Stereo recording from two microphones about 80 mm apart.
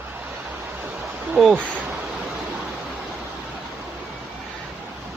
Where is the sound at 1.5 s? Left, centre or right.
Right.